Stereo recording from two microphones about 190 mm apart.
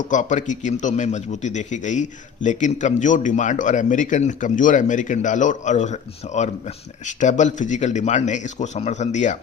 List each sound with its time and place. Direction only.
0.0 s a man's voice: 40° left (ahead or behind)